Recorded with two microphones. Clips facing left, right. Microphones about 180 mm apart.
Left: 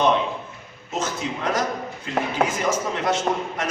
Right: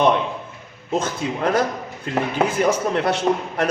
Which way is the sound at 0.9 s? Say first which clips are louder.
Right 4 dB; 55° right (ahead or behind).